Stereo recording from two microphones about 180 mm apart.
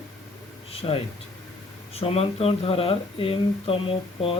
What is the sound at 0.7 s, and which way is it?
Speech, 30° left (ahead or behind).